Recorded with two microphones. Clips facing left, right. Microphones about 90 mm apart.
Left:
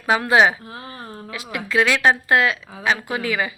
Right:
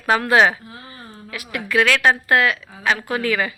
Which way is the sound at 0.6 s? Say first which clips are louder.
Left 4 dB; 50° left (ahead or behind).